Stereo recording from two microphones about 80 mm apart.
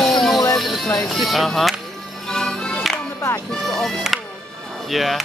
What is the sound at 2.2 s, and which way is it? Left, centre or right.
Music, centre.